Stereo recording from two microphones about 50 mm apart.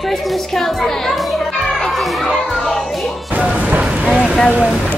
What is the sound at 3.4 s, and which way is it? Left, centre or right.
Music, right.